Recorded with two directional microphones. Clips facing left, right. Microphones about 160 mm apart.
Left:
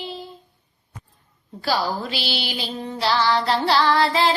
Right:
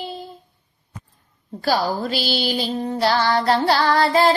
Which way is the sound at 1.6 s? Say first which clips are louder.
Right 3 dB; 45° right (ahead or behind).